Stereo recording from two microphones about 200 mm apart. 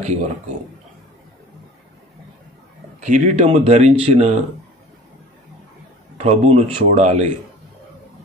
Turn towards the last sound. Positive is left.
turn(degrees=-30)  # may be behind; listen again after turning